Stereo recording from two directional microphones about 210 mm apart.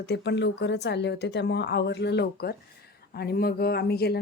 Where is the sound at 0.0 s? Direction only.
55° left (ahead or behind).